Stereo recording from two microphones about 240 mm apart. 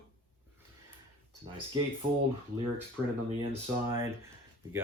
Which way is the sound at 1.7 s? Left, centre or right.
Centre.